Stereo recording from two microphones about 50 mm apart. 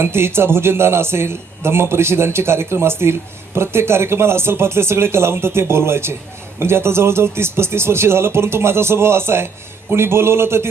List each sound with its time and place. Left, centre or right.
0.0 s a man's voice: right